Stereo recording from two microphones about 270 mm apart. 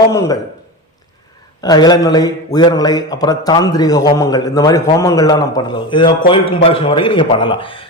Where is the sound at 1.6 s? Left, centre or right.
Centre.